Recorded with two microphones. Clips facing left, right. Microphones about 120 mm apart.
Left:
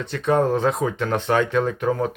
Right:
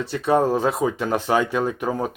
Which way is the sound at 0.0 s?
5° right (ahead or behind).